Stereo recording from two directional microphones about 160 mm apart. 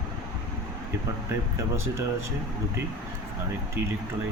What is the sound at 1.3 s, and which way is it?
Speech, 15° right (ahead or behind).